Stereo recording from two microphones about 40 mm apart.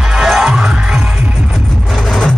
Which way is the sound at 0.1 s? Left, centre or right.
Centre.